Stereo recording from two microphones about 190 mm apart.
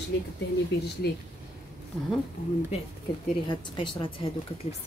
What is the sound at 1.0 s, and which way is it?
Speech, 60° left (ahead or behind).